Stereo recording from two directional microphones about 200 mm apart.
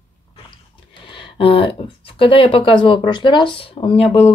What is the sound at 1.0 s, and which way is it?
Speech, 25° left (ahead or behind).